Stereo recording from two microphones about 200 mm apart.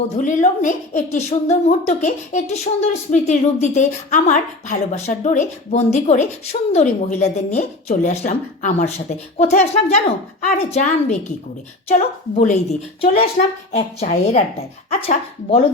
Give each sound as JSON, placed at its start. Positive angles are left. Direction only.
{"t": 0.2, "sound": "a woman's voice", "side_deg": 40}